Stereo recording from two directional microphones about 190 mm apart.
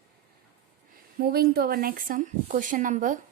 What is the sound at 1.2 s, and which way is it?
Speech, 55° right (ahead or behind).